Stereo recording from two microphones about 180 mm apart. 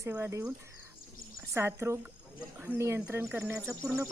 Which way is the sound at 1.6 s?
15° right (ahead or behind).